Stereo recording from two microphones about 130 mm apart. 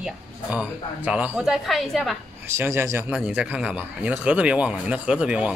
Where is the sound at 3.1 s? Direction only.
10° right (ahead or behind).